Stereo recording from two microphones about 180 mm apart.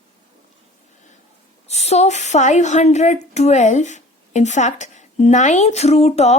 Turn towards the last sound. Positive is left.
turn(degrees=35)  # may be behind; listen again after turning